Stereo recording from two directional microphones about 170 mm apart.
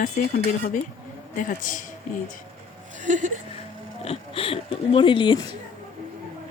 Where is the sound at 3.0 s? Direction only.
45° right (ahead or behind).